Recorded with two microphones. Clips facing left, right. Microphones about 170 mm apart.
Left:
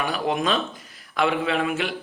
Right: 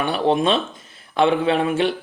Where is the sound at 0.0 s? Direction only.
30° right (ahead or behind).